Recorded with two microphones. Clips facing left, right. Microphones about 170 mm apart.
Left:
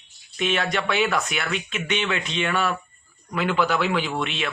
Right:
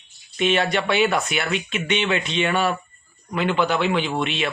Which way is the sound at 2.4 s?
30° right (ahead or behind).